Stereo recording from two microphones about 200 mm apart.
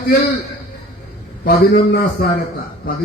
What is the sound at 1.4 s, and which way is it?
Speech, 45° left (ahead or behind).